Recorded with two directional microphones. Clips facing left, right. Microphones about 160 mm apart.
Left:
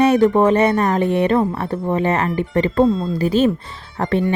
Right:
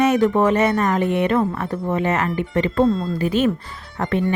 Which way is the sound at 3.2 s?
35° left (ahead or behind).